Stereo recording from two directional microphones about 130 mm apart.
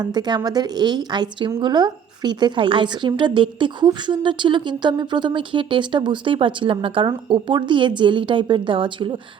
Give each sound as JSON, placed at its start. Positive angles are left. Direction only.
{"t": 0.0, "sound": "a woman's voice", "side_deg": -30}